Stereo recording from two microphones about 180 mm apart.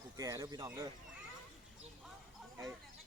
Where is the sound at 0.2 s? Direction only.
20° right (ahead or behind).